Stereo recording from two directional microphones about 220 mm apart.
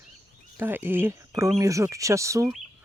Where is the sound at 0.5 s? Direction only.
10° right (ahead or behind).